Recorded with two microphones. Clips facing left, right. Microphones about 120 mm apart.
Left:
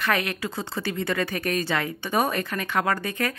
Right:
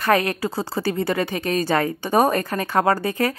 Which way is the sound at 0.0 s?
35° right (ahead or behind).